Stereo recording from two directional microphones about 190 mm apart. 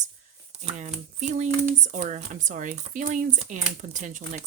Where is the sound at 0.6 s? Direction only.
40° right (ahead or behind).